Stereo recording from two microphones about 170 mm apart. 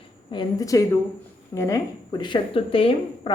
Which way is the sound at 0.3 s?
25° left (ahead or behind).